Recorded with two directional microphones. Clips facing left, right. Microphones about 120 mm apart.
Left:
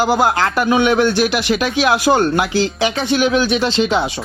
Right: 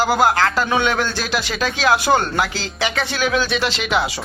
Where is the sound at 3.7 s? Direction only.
30° left (ahead or behind).